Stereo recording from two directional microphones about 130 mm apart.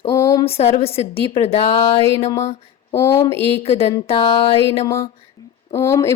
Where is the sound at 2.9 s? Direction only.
25° left (ahead or behind).